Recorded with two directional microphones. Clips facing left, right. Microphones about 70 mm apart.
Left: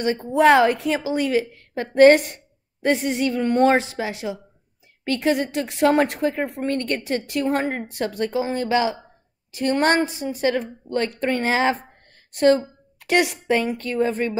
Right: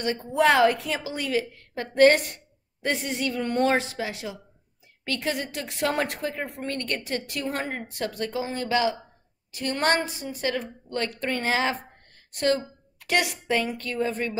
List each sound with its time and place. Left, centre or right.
0.0 s a woman's voice: left